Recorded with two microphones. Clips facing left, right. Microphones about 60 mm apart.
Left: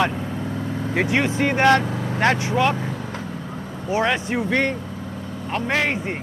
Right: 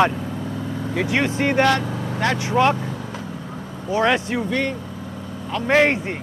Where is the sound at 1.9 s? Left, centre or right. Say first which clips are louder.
Left 1 dB; centre.